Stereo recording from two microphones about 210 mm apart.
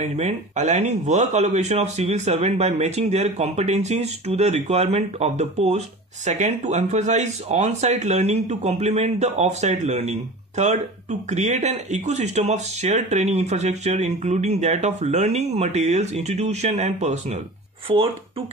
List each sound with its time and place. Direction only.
0.0 s a man's voice: 30° right (ahead or behind)